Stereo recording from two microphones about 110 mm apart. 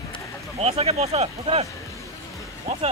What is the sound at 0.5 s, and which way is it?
Speech, 65° right (ahead or behind).